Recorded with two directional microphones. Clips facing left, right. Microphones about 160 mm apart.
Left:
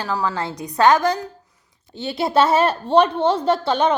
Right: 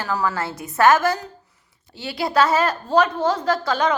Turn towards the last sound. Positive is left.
turn(degrees=30)  # may be behind; listen again after turning